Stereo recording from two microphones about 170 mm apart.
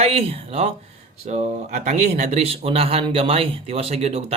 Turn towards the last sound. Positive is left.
turn(degrees=-35)  # may be behind; listen again after turning